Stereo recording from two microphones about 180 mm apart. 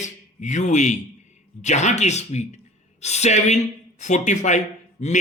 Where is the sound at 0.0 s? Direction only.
40° left (ahead or behind).